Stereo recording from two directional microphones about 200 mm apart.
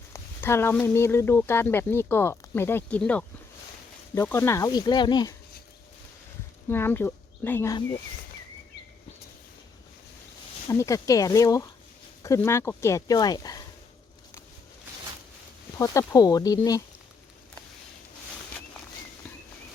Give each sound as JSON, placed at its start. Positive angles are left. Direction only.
{"t": 0.1, "sound": "speech", "side_deg": 10}
{"t": 6.7, "sound": "speech", "side_deg": 10}
{"t": 10.7, "sound": "speech", "side_deg": 15}
{"t": 15.8, "sound": "speech", "side_deg": 15}